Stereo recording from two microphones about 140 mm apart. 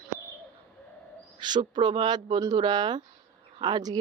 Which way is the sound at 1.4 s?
30° right (ahead or behind).